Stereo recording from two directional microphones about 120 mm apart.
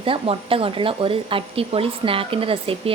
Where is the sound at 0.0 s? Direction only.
50° right (ahead or behind).